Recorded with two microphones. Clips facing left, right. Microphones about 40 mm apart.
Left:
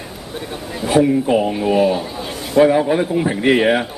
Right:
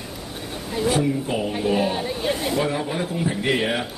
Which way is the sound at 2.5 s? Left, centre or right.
Left.